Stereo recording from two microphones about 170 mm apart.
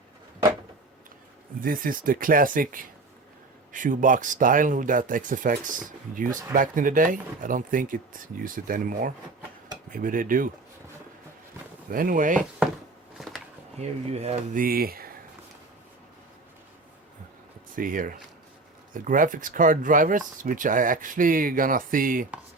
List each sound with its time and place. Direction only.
1.6 s speech: 55° right (ahead or behind)
11.9 s speech: 55° right (ahead or behind)
13.1 s a sound: centre (ahead or behind)
13.7 s speech: 40° right (ahead or behind)
14.6 s speech: 60° right (ahead or behind)
17.7 s speech: 55° right (ahead or behind)